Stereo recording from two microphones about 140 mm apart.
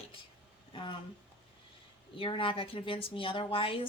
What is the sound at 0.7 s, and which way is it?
Speech, 35° left (ahead or behind).